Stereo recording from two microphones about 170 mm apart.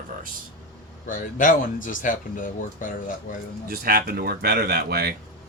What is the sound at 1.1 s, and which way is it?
Speech, 50° left (ahead or behind).